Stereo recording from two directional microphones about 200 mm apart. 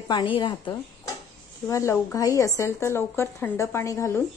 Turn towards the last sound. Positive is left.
turn(degrees=15)  # may be behind; listen again after turning